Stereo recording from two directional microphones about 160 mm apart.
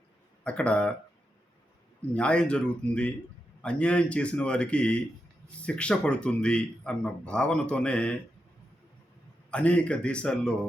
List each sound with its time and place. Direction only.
0.4 s speech: 5° left (ahead or behind)
2.0 s speech: 5° left (ahead or behind)
9.5 s speech: 10° left (ahead or behind)